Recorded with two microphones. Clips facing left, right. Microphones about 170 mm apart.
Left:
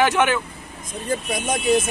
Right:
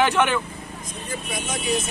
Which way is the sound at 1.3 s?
50° left (ahead or behind).